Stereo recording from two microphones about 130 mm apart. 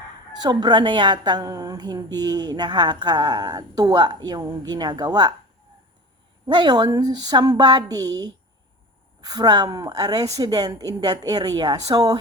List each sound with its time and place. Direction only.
0.4 s a woman's voice: 35° right (ahead or behind)
6.5 s a woman's voice: 35° right (ahead or behind)